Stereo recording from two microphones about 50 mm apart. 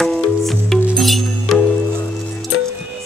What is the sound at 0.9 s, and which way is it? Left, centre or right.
Music, centre.